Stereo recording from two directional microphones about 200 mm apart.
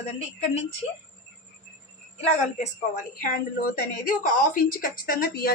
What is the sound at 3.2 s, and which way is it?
A woman's voice, 45° left (ahead or behind).